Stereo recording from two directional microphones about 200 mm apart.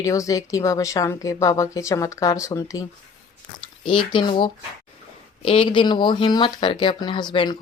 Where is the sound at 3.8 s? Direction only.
25° left (ahead or behind).